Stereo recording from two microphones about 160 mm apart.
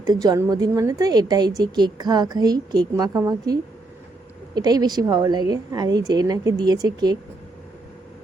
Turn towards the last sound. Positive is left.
turn(degrees=-25)  # may be behind; listen again after turning